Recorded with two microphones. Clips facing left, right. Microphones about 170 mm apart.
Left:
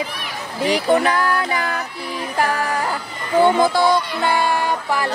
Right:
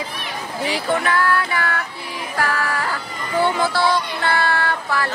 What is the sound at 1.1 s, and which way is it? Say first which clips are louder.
Music: even; 20° left (ahead or behind).